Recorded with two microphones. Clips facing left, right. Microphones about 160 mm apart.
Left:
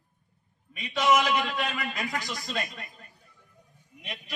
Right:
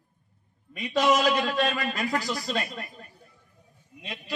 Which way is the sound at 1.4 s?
35° right (ahead or behind).